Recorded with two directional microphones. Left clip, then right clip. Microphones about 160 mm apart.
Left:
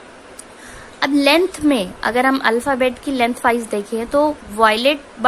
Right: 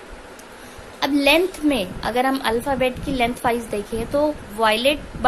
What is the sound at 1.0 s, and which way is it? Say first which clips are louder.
A woman's voice: left 3 dB; 25° left (ahead or behind).